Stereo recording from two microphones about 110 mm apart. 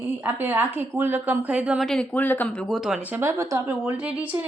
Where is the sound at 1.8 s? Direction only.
5° left (ahead or behind).